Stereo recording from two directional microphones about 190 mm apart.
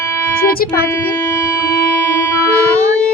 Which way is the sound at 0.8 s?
15° left (ahead or behind).